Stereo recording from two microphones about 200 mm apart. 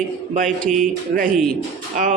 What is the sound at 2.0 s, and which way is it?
Speech, 40° right (ahead or behind).